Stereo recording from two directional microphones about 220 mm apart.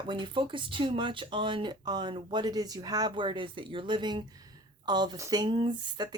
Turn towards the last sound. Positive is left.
turn(degrees=-20)  # may be behind; listen again after turning